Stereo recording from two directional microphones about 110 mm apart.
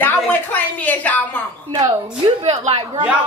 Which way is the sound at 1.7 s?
45° right (ahead or behind).